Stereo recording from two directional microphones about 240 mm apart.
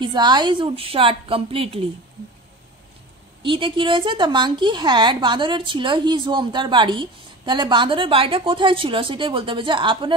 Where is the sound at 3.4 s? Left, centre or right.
Right.